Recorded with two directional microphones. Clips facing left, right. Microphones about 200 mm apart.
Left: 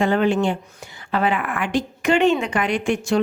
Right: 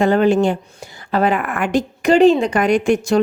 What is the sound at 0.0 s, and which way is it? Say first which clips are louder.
Speech: right 5 dB; 40° right (ahead or behind).